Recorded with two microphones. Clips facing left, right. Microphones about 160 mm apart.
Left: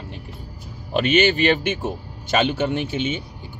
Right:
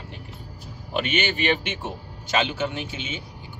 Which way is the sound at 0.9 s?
40° left (ahead or behind).